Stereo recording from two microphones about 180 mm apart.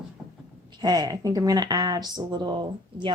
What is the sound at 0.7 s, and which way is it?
Speech, 25° right (ahead or behind).